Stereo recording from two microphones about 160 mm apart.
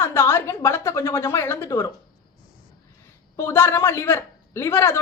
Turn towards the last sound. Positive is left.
turn(degrees=15)  # may be behind; listen again after turning